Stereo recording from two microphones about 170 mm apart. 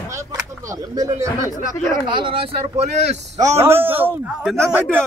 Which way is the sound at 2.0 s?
30° right (ahead or behind).